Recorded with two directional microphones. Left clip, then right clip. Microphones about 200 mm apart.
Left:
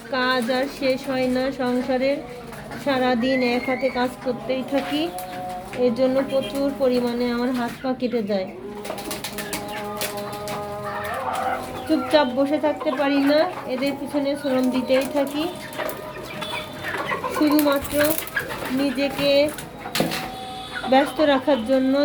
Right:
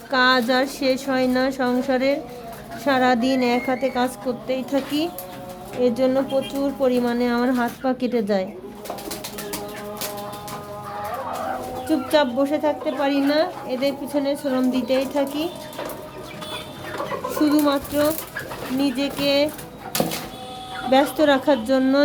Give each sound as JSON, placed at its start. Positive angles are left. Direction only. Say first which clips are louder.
{"t": 0.1, "sound": "speech", "louder": "right 4 dB", "side_deg": -20}
{"t": 11.9, "sound": "speech", "louder": "left 1 dB", "side_deg": -5}
{"t": 17.4, "sound": "a woman's voice", "louder": "even", "side_deg": -15}
{"t": 18.8, "sound": "a woman's voice", "louder": "even", "side_deg": -15}
{"t": 20.9, "sound": "a woman's voice", "louder": "right 1 dB", "side_deg": -10}